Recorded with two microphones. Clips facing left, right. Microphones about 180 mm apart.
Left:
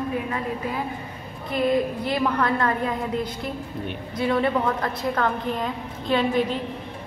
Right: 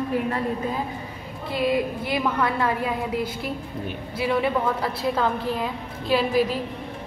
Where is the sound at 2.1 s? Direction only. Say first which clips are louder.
Left 1 dB; 5° right (ahead or behind).